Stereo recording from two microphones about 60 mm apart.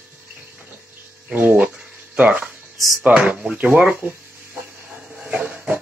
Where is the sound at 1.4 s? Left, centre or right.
Right.